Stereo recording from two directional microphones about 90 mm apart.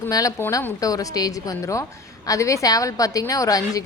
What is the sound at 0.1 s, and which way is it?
A woman's voice, 40° left (ahead or behind).